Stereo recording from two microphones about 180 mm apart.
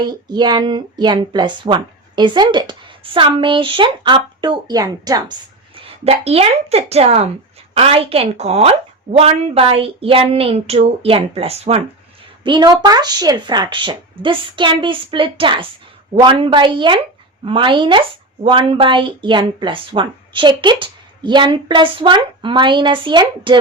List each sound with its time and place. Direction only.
0.0 s speech: 25° right (ahead or behind)
5.7 s speech: 30° right (ahead or behind)